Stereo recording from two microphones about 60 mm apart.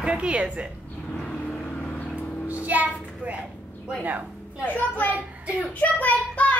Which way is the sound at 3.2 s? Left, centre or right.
Right.